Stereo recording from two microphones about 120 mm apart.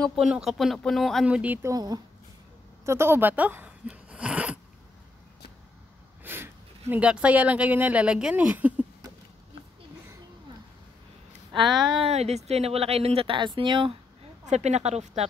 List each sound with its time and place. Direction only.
0.0 s speech: centre (ahead or behind)
1.2 s speech: 10° right (ahead or behind)
1.6 s speech: 30° right (ahead or behind); by 4.6 s 10° right (ahead or behind)
6.2 s speech: 15° right (ahead or behind)
11.5 s speech: centre (ahead or behind)
12.0 s speech: 60° right (ahead or behind); by 13.9 s 45° right (ahead or behind)
14.4 s speech: 70° right (ahead or behind)